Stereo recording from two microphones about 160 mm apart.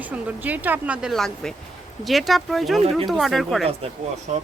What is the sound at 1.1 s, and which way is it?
Speech, 5° left (ahead or behind).